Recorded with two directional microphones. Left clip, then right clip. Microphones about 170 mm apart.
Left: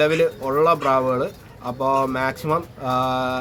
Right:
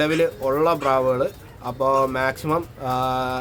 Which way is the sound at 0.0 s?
5° right (ahead or behind).